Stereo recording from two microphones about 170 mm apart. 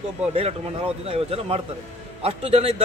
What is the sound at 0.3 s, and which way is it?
A man's voice, 35° right (ahead or behind).